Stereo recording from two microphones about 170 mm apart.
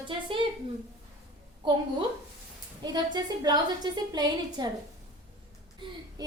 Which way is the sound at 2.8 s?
25° right (ahead or behind).